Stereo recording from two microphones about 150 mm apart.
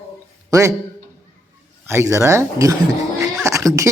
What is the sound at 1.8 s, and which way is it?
Speech, 20° right (ahead or behind).